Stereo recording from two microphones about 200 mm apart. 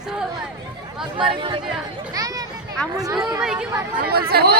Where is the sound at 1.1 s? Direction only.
25° right (ahead or behind).